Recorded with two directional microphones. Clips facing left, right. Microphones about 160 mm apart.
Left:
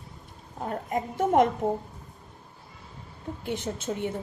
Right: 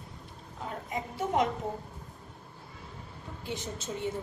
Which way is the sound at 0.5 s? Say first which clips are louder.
Left 7 dB; 50° left (ahead or behind).